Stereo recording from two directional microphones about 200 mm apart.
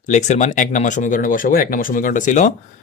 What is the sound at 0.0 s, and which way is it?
Speech, 35° left (ahead or behind).